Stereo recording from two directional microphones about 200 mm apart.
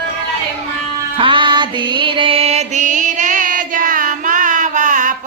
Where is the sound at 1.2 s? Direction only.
25° right (ahead or behind).